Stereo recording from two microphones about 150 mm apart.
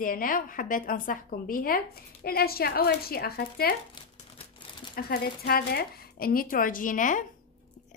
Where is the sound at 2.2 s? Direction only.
90° left.